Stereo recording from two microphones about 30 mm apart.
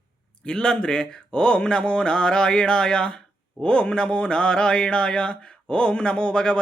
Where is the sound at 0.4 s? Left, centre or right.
Left.